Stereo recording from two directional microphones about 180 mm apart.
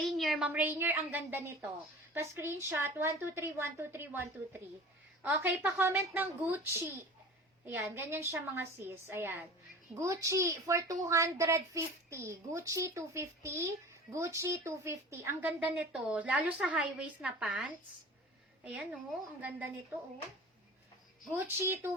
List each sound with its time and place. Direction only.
0.0 s a woman's voice: centre (ahead or behind)
21.3 s a woman's voice: 15° right (ahead or behind)